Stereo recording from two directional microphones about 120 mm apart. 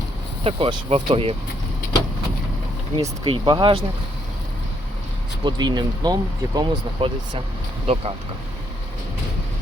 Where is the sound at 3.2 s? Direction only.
40° right (ahead or behind).